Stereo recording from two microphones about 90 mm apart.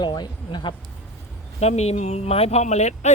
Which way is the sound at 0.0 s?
55° left (ahead or behind).